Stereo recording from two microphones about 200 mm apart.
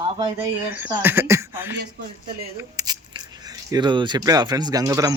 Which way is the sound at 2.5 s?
15° right (ahead or behind).